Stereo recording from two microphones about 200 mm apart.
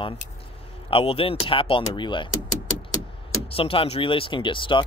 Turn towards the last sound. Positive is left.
turn(degrees=25)  # may be behind; listen again after turning